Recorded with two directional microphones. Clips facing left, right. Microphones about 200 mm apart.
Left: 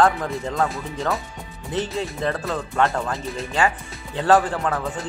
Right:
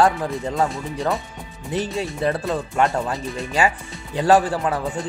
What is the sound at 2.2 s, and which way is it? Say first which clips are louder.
Speech: right 5 dB; 15° right (ahead or behind).